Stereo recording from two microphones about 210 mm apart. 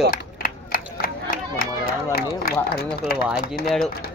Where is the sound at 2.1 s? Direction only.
45° left (ahead or behind).